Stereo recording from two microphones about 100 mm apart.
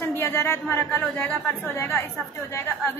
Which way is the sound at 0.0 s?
25° left (ahead or behind).